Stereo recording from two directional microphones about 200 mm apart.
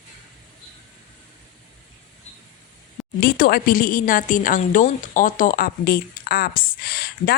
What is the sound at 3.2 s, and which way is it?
A woman's voice, 50° left (ahead or behind).